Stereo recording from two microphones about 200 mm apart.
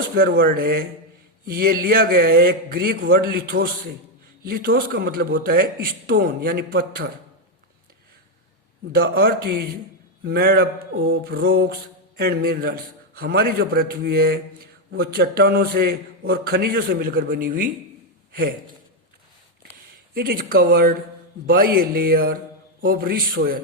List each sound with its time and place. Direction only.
0.2 s mantra: 50° right (ahead or behind)
8.9 s mantra: 50° right (ahead or behind)
10.9 s mantra: 70° right (ahead or behind); by 17.7 s 45° right (ahead or behind)
18.3 s a sound: 50° right (ahead or behind)
20.1 s mantra: 50° right (ahead or behind)